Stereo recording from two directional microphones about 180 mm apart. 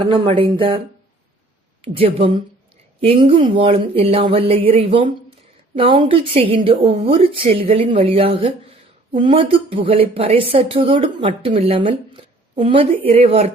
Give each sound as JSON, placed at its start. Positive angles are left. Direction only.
{"t": 0.0, "sound": "speech", "side_deg": -30}
{"t": 1.8, "sound": "speech", "side_deg": -30}